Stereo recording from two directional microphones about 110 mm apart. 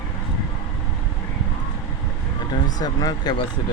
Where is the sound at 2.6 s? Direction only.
35° left (ahead or behind).